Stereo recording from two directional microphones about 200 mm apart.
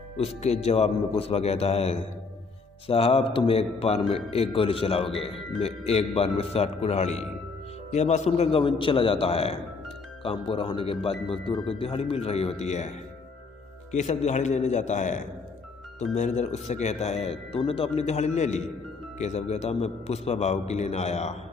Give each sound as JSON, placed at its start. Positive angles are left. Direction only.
{"t": 0.2, "sound": "speech", "side_deg": 30}
{"t": 13.9, "sound": "speech", "side_deg": 35}